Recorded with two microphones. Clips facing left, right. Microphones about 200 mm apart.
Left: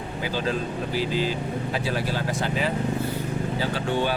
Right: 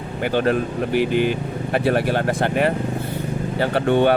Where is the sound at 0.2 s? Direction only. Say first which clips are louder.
Right 8 dB; 60° right (ahead or behind).